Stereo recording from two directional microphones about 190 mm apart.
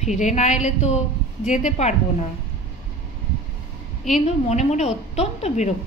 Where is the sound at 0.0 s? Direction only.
40° left (ahead or behind).